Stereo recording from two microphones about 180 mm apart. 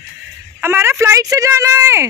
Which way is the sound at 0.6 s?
15° right (ahead or behind).